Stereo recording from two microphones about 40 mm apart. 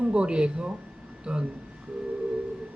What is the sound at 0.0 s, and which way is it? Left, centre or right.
Speech, right.